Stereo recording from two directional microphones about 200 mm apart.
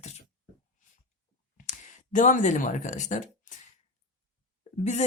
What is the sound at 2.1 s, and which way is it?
Speech, 40° left (ahead or behind).